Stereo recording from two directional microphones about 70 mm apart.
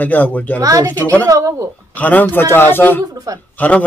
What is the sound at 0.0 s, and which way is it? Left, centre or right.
Speech, left.